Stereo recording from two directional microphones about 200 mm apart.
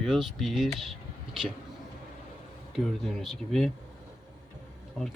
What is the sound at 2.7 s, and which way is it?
A man's voice, centre (ahead or behind).